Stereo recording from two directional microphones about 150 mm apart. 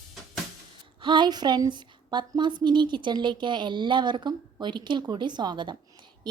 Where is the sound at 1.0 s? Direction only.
30° right (ahead or behind).